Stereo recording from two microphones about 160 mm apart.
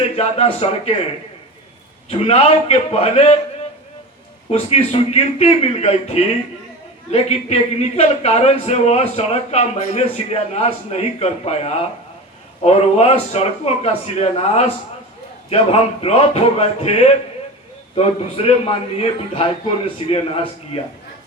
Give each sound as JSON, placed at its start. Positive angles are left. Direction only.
{"t": 0.2, "sound": "a man's voice", "side_deg": 40}
{"t": 2.0, "sound": "a man's voice", "side_deg": 40}
{"t": 4.7, "sound": "a man's voice", "side_deg": 40}